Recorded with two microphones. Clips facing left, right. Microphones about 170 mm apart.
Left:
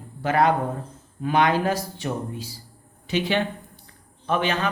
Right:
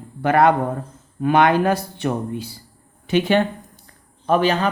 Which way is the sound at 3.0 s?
50° right (ahead or behind).